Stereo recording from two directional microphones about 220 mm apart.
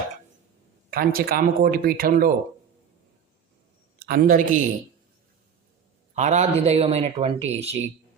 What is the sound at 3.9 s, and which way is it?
Speech, 45° right (ahead or behind).